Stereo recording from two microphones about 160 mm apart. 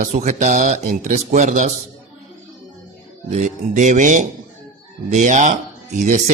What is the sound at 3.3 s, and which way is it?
A man's voice, 50° right (ahead or behind).